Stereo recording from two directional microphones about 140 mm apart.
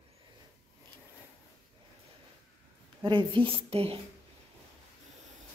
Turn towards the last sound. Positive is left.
turn(degrees=-45)  # may be behind; listen again after turning